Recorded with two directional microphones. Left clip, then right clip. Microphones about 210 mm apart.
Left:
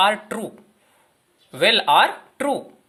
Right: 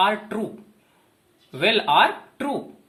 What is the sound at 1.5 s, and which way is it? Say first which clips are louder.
Speech: left 2 dB; 50° left (ahead or behind).